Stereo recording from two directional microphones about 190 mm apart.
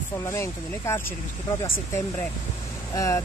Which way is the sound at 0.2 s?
15° left (ahead or behind).